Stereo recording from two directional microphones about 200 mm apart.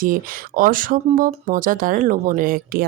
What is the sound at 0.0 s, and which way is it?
Speech, 45° right (ahead or behind).